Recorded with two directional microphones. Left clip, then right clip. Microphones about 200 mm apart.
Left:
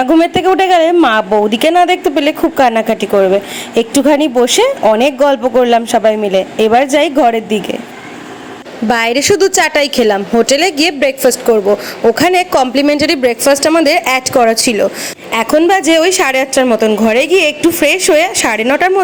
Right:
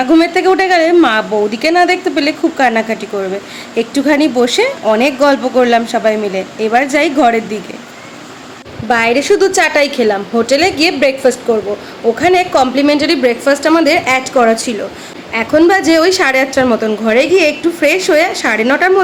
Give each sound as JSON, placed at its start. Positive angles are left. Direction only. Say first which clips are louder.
{"t": 0.0, "sound": "a woman's voice", "louder": "even", "side_deg": 25}
{"t": 8.9, "sound": "a woman's voice", "louder": "even", "side_deg": 35}